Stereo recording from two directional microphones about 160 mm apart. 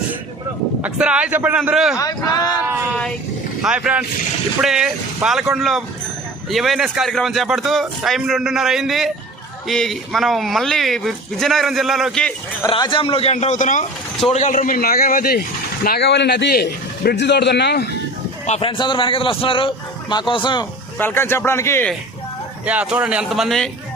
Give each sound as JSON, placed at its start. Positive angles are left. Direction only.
{"t": 0.8, "sound": "a man's voice", "side_deg": -5}
{"t": 3.6, "sound": "a man's voice", "side_deg": -5}
{"t": 12.6, "sound": "a man's voice", "side_deg": 25}
{"t": 15.8, "sound": "a man's voice", "side_deg": 80}
{"t": 18.4, "sound": "a man's voice", "side_deg": 40}
{"t": 21.0, "sound": "speech", "side_deg": 15}
{"t": 22.6, "sound": "a man's voice", "side_deg": -10}